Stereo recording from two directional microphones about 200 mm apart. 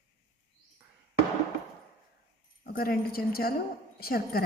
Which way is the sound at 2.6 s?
50° left (ahead or behind).